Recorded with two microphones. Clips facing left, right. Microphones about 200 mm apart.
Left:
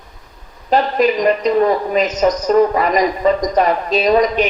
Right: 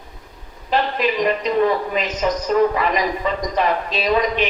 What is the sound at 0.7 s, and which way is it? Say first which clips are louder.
A woman's voice: left 6 dB; 40° left (ahead or behind).